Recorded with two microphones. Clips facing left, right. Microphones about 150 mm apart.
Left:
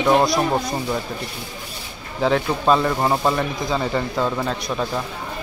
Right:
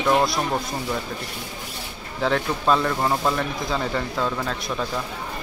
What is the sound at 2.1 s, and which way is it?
Speech, 5° left (ahead or behind).